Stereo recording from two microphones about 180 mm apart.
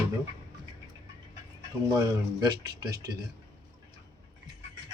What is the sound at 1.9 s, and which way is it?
Speech, 20° right (ahead or behind).